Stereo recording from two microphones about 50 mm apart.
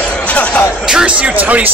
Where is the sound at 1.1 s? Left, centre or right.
Right.